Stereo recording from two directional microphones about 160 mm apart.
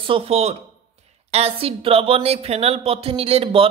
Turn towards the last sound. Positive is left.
turn(degrees=-40)  # may be behind; listen again after turning